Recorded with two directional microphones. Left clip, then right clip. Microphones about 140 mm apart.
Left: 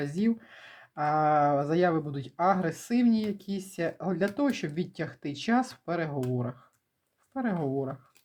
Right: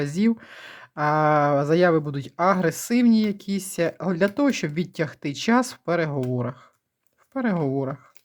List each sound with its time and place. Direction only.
0.0 s speech: 40° right (ahead or behind)